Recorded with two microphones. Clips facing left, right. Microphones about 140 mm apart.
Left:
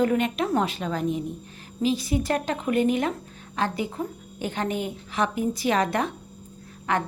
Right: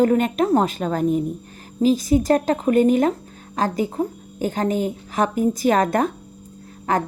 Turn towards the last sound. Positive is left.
turn(degrees=-40)  # may be behind; listen again after turning